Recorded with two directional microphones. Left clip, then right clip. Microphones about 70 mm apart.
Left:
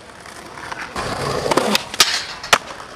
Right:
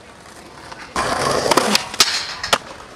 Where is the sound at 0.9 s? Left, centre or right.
Right.